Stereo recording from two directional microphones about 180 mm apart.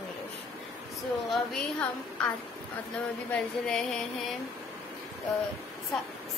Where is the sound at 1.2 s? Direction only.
Centre (ahead or behind).